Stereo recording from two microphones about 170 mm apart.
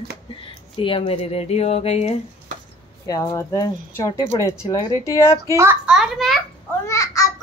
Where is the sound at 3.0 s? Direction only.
20° left (ahead or behind).